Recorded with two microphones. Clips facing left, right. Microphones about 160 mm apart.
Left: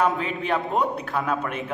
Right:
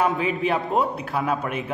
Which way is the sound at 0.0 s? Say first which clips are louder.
Right 2 dB; centre (ahead or behind).